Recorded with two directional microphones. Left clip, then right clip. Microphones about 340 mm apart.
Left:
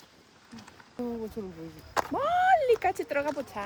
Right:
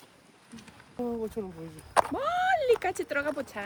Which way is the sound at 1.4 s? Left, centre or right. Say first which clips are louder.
Right 2 dB; right.